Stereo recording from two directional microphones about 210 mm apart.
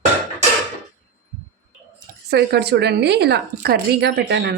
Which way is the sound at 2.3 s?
50° right (ahead or behind).